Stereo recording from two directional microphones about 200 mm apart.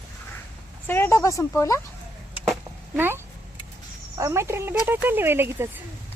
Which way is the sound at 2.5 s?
10° right (ahead or behind).